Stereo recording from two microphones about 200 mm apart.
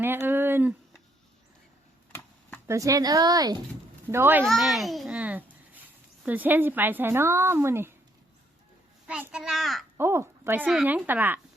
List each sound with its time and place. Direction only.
0.0 s speech: 10° right (ahead or behind)
2.6 s a woman's voice: 15° right (ahead or behind)
4.4 s a child's voice: centre (ahead or behind)
9.0 s a child's voice: 5° right (ahead or behind)
10.0 s a woman's voice: 10° right (ahead or behind)